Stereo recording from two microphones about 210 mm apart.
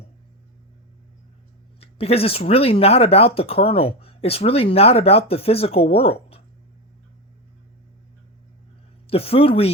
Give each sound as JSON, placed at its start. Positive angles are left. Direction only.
{"t": 1.8, "sound": "speech", "side_deg": 30}
{"t": 9.0, "sound": "speech", "side_deg": 25}